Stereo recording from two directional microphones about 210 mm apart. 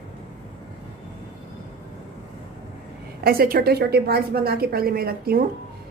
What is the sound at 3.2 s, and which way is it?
A woman's voice, 45° right (ahead or behind).